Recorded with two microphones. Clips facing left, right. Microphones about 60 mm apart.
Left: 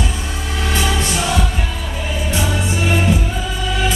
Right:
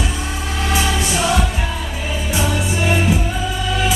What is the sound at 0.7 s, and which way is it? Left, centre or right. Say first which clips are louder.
Choir: even; centre.